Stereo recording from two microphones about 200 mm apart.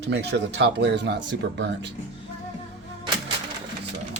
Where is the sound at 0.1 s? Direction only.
60° right (ahead or behind).